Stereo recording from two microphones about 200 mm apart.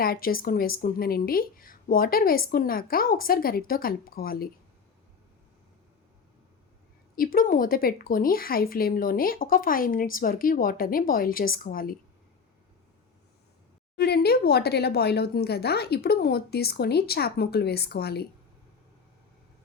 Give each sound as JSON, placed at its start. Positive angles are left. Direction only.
{"t": 0.0, "sound": "speech", "side_deg": 45}
{"t": 7.2, "sound": "speech", "side_deg": 45}
{"t": 13.9, "sound": "speech", "side_deg": 55}